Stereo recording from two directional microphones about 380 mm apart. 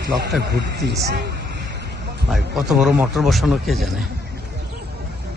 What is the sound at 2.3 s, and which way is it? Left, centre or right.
Speech, centre.